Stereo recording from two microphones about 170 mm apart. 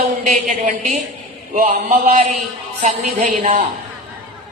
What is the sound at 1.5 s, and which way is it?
Speech, 55° right (ahead or behind).